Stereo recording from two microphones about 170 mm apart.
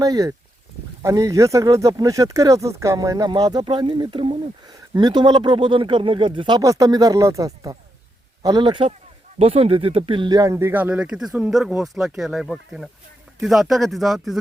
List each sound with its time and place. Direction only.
0.0 s speech: 20° right (ahead or behind); by 14.3 s centre (ahead or behind)